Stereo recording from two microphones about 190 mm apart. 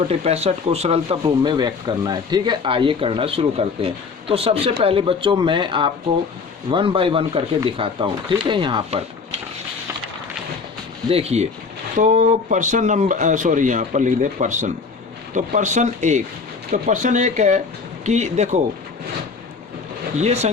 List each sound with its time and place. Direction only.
0.1 s speech: 35° right (ahead or behind)
11.1 s speech: 35° right (ahead or behind)
20.1 s speech: 35° right (ahead or behind)